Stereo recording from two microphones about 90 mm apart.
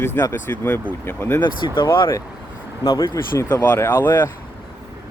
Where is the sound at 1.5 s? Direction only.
60° left (ahead or behind).